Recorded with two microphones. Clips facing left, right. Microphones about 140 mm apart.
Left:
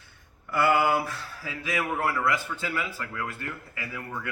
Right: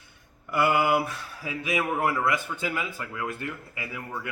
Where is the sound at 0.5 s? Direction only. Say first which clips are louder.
Even; 15° right (ahead or behind).